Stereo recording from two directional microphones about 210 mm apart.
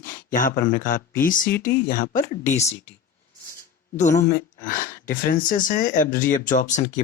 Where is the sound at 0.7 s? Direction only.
40° left (ahead or behind).